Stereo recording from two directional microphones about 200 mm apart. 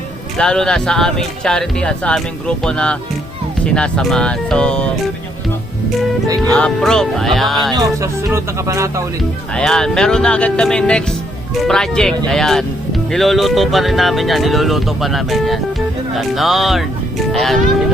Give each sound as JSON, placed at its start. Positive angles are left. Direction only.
{"t": 0.3, "sound": "speech", "side_deg": 5}
{"t": 6.5, "sound": "speech", "side_deg": 5}
{"t": 7.7, "sound": "speech", "side_deg": -15}
{"t": 9.6, "sound": "speech", "side_deg": 5}